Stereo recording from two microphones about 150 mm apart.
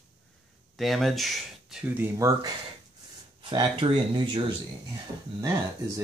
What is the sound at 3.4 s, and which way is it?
Speech, 35° right (ahead or behind).